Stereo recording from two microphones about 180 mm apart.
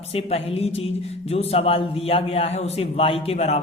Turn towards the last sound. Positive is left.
turn(degrees=35)  # may be behind; listen again after turning